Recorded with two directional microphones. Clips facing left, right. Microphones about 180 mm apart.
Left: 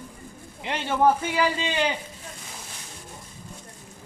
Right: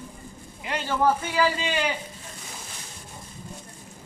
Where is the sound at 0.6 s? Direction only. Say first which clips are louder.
Left 2 dB; 25° left (ahead or behind).